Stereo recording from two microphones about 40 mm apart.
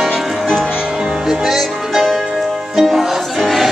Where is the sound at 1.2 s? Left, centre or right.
Centre.